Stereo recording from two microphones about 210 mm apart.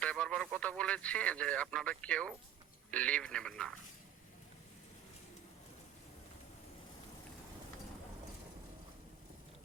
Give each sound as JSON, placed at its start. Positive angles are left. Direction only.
{"t": 0.0, "sound": "speech", "side_deg": 5}